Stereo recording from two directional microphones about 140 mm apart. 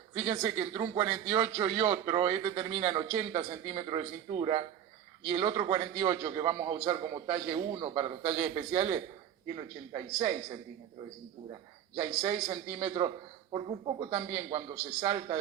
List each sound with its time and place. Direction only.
0.1 s a woman's voice: 50° right (ahead or behind); by 3.2 s 35° right (ahead or behind)
3.2 s a man's voice: 45° right (ahead or behind)
9.6 s a man's voice: 35° right (ahead or behind)
12.8 s a man's voice: 40° right (ahead or behind)